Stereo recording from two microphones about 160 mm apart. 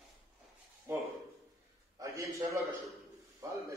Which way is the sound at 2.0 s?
20° right (ahead or behind).